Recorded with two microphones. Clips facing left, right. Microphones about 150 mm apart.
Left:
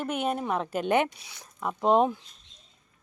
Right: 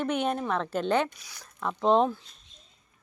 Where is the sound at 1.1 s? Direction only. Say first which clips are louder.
Left 1 dB; 25° left (ahead or behind).